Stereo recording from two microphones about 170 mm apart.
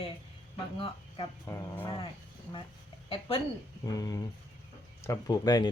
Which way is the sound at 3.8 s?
20° left (ahead or behind).